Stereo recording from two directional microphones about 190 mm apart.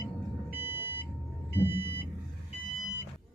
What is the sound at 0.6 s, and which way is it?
Vehicle, 25° left (ahead or behind).